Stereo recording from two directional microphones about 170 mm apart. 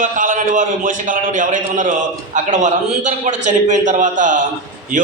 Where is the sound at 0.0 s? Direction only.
50° right (ahead or behind).